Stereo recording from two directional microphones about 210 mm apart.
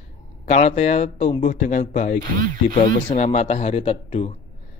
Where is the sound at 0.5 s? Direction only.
30° left (ahead or behind).